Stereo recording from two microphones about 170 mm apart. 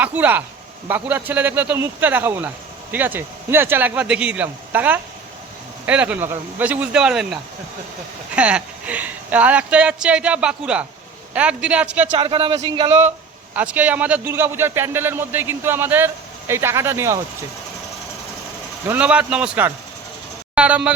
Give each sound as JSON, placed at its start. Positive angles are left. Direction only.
{"t": 0.0, "sound": "a man's voice", "side_deg": -10}
{"t": 12.1, "sound": "speech", "side_deg": -35}
{"t": 13.1, "sound": "a man's voice", "side_deg": -10}
{"t": 18.9, "sound": "a man's voice", "side_deg": -5}